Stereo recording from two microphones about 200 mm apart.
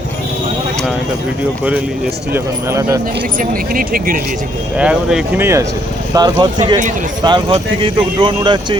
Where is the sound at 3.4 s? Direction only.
45° right (ahead or behind).